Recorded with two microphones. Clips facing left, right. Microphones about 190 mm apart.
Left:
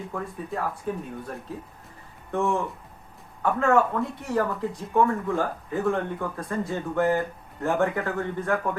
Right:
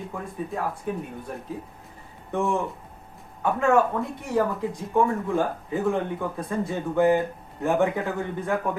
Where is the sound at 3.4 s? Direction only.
15° right (ahead or behind).